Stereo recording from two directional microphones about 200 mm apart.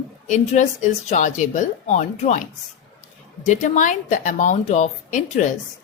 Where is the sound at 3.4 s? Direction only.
40° left (ahead or behind).